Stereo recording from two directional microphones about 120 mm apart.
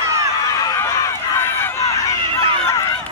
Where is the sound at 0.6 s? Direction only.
25° left (ahead or behind).